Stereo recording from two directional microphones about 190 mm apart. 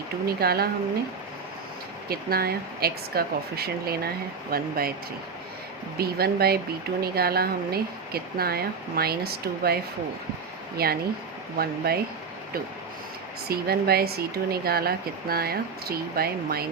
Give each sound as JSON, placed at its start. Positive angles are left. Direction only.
{"t": 0.3, "sound": "speech", "side_deg": -55}
{"t": 2.0, "sound": "speech", "side_deg": -55}
{"t": 6.0, "sound": "speech", "side_deg": -55}
{"t": 10.8, "sound": "speech", "side_deg": -55}
{"t": 13.5, "sound": "speech", "side_deg": -55}